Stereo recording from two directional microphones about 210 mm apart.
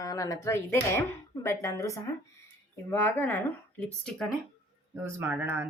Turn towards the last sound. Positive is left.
turn(degrees=-10)  # may be behind; listen again after turning